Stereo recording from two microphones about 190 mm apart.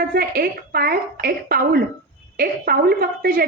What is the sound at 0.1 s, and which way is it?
A woman's voice, 50° right (ahead or behind).